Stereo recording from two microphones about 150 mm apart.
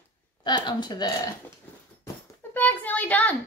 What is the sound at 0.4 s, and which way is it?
Speech, 30° left (ahead or behind).